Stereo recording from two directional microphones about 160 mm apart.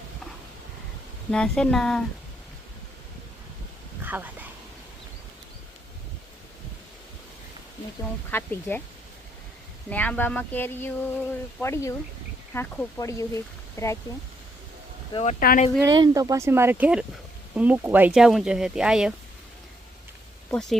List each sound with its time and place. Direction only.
1.3 s speech: 5° left (ahead or behind)
4.0 s a sound: 10° right (ahead or behind)
8.3 s speech: 15° left (ahead or behind)
9.9 s speech: 10° left (ahead or behind)
15.1 s speech: 40° left (ahead or behind)
15.4 s speech: 65° left (ahead or behind)
15.8 s speech: 20° right (ahead or behind); by 19.1 s 5° right (ahead or behind)
20.5 s speech: 5° left (ahead or behind)